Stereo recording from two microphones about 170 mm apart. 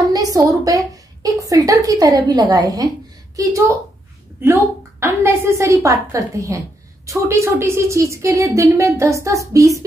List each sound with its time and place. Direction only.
0.1 s a woman's voice: 20° right (ahead or behind)